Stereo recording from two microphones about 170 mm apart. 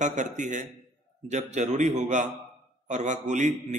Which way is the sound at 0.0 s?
45° right (ahead or behind).